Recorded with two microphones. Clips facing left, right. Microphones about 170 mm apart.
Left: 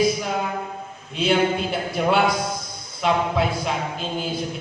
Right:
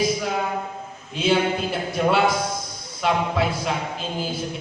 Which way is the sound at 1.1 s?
Centre (ahead or behind).